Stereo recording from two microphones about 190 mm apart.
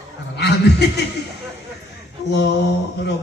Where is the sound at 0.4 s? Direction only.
65° left (ahead or behind).